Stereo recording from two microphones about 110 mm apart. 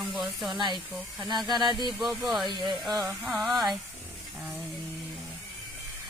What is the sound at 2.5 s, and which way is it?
Speech, 45° right (ahead or behind).